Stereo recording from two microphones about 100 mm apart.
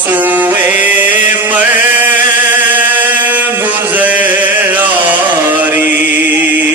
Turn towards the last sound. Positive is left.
turn(degrees=-20)  # may be behind; listen again after turning